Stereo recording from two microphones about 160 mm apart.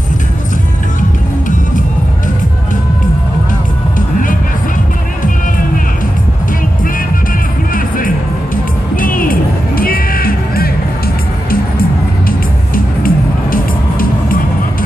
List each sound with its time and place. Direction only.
8.9 s music: 60° left (ahead or behind)
12.3 s music: 65° left (ahead or behind)